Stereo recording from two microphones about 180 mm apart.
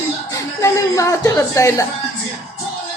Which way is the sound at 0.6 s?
20° left (ahead or behind).